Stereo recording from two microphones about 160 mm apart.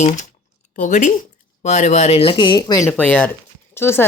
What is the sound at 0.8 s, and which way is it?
Speech, 55° left (ahead or behind).